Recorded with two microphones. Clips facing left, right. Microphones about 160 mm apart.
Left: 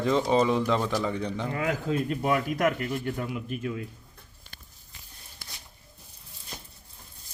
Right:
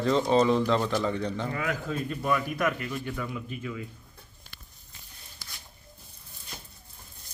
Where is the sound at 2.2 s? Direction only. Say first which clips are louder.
Left 1 dB; 55° left (ahead or behind).